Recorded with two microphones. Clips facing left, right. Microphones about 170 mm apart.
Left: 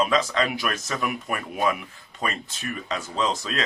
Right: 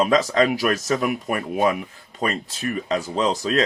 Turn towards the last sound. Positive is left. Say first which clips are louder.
# right 5 dB
turn(degrees=-35)  # may be behind; listen again after turning